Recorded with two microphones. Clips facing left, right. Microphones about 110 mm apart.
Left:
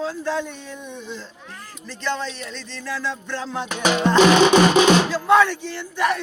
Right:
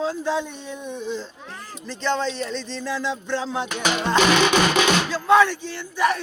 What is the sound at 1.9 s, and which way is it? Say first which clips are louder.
Music: right 3 dB; 25° right (ahead or behind).